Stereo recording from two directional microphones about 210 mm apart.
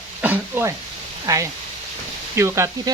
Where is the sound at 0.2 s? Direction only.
10° right (ahead or behind).